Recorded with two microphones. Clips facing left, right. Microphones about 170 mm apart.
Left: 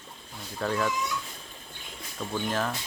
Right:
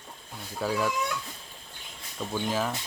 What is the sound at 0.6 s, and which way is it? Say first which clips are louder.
Speech: even; 5° right (ahead or behind).